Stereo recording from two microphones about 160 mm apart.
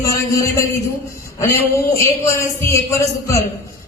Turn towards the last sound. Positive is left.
turn(degrees=20)  # may be behind; listen again after turning